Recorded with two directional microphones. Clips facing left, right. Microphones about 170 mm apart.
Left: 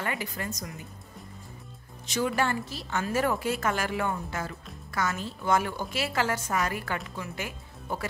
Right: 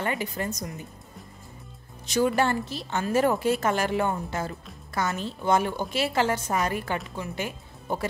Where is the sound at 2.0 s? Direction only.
35° right (ahead or behind).